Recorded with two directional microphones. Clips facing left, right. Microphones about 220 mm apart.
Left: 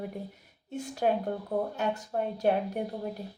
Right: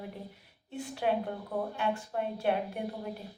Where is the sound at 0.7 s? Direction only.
40° left (ahead or behind).